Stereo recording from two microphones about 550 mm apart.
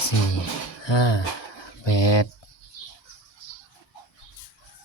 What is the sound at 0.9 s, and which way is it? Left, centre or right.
Speech, left.